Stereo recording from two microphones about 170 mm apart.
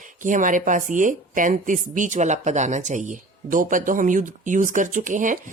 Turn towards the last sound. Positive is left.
turn(degrees=-50)  # may be behind; listen again after turning